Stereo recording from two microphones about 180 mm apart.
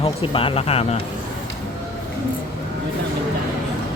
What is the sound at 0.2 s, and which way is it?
Speech, 30° left (ahead or behind).